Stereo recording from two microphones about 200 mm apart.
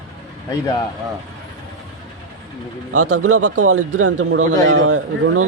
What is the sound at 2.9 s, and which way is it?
A man's voice, 90° right.